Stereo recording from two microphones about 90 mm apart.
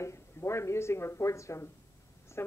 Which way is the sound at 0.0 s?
30° left (ahead or behind).